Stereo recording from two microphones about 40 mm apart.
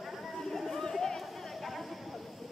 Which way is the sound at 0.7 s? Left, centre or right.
Centre.